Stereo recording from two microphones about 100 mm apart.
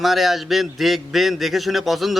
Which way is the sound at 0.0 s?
Centre (ahead or behind).